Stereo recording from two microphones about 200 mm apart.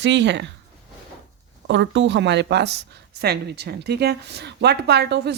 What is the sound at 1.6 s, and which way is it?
A woman's voice, 65° right (ahead or behind).